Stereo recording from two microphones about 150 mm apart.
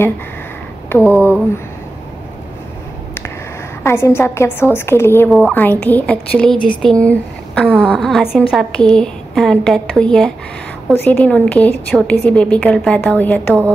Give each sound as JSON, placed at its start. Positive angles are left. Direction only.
{"t": 1.0, "sound": "a woman's voice", "side_deg": 15}
{"t": 3.8, "sound": "a woman's voice", "side_deg": 15}